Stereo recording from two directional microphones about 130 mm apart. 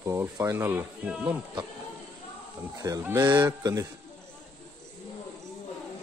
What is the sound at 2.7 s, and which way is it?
Speech, 25° right (ahead or behind).